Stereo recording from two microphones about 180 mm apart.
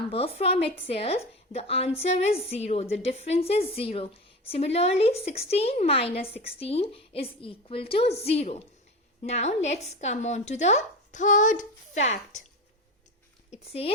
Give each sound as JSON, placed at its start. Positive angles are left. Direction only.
{"t": 0.1, "sound": "speech", "side_deg": 35}
{"t": 13.5, "sound": "speech", "side_deg": 35}